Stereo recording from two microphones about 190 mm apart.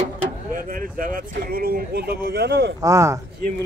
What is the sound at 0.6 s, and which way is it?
Speech, 45° right (ahead or behind).